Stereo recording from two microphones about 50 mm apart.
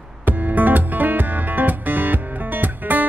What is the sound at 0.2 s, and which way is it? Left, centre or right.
Music, right.